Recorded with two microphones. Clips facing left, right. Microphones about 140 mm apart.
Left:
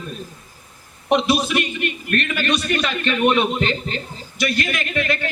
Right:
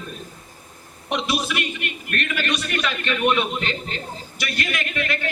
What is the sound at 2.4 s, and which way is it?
A man's voice, 30° left (ahead or behind).